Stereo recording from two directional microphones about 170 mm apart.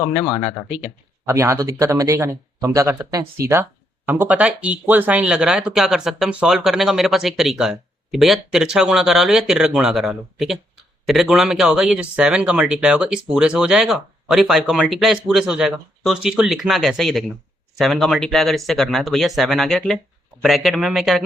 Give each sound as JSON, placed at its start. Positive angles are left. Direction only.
{"t": 0.7, "sound": "speech", "side_deg": -10}